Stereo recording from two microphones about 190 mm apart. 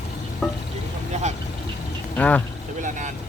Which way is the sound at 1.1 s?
35° right (ahead or behind).